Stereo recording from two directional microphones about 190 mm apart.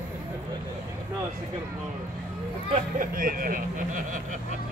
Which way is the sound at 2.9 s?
45° right (ahead or behind).